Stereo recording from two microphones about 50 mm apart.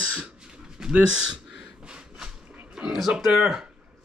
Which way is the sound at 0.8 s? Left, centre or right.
Centre.